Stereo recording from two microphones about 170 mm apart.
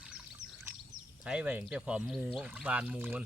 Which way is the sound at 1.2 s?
5° right (ahead or behind).